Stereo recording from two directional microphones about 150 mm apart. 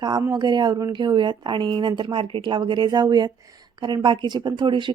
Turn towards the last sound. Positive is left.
turn(degrees=-30)  # may be behind; listen again after turning